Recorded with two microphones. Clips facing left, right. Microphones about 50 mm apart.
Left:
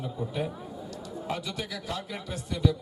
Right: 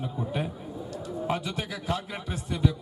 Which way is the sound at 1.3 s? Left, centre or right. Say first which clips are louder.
Right 2 dB; right.